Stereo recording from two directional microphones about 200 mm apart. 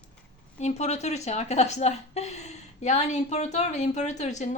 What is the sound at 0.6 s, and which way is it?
A woman's voice, 35° left (ahead or behind).